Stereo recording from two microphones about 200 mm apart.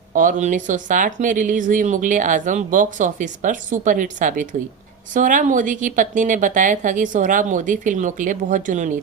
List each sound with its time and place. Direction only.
0.1 s speech: 40° right (ahead or behind)